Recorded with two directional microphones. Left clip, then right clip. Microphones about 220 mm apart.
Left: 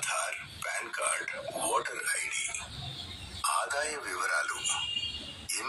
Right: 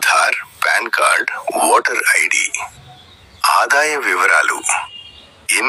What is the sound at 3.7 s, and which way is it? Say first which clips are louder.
Speech: right 19 dB; 40° right (ahead or behind).